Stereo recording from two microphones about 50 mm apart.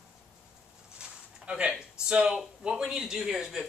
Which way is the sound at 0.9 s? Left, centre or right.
Centre.